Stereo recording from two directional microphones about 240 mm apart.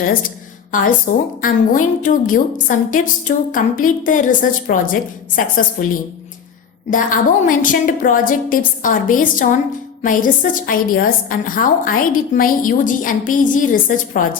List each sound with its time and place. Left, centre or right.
1.4 s a woman's voice: left